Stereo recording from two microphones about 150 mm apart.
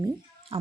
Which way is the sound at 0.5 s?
40° right (ahead or behind).